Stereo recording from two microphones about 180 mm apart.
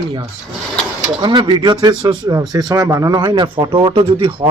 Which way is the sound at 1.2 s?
25° right (ahead or behind).